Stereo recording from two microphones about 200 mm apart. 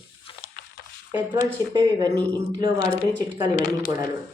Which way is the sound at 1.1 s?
15° right (ahead or behind).